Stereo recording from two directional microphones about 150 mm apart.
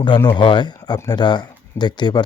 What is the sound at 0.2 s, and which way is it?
Speech, 30° left (ahead or behind).